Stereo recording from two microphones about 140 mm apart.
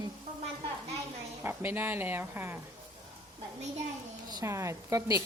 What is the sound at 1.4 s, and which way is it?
Speech, 15° right (ahead or behind).